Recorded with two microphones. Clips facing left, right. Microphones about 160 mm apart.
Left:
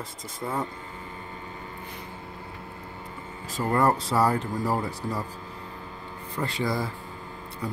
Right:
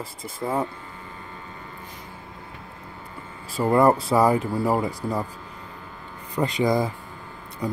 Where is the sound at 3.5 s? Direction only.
10° right (ahead or behind).